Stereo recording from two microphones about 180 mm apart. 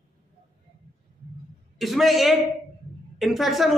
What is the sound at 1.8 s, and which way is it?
Speech, centre (ahead or behind).